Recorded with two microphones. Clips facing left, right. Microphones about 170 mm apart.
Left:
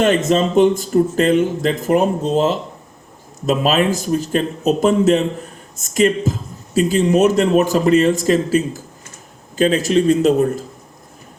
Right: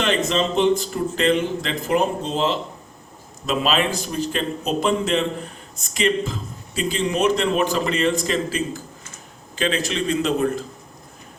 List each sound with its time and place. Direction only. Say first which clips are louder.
0.0 s speech: left 6 dB; 45° left (ahead or behind)